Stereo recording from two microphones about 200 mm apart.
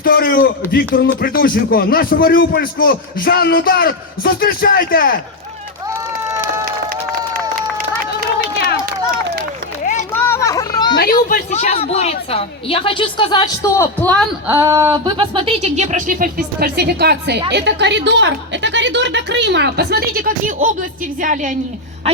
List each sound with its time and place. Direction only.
0.0 s speech: 45° left (ahead or behind)
5.9 s run: 15° right (ahead or behind)
10.1 s a sound: 10° left (ahead or behind)
10.9 s a woman's voice: 45° left (ahead or behind); by 14.1 s 15° left (ahead or behind)
14.4 s a woman's voice: 15° right (ahead or behind); by 22.2 s 30° right (ahead or behind)